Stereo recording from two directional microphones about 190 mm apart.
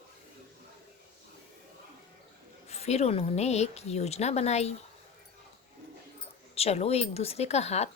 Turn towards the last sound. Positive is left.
turn(degrees=35)  # may be behind; listen again after turning